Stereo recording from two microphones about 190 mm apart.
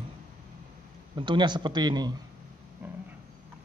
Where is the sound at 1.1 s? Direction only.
25° right (ahead or behind).